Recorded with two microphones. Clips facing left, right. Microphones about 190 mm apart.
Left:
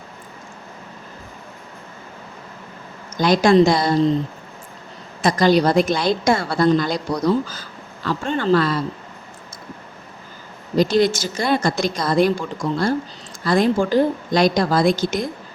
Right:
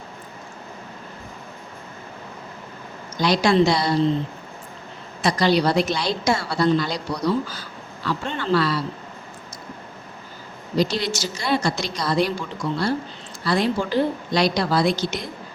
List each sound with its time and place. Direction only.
3.2 s a woman's voice: 50° left (ahead or behind)
5.2 s a woman's voice: 45° left (ahead or behind)
10.8 s a woman's voice: 50° left (ahead or behind)